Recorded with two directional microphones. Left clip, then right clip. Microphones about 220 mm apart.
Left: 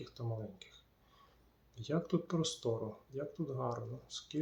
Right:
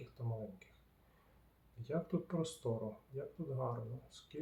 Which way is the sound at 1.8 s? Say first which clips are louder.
Left 4 dB; 25° left (ahead or behind).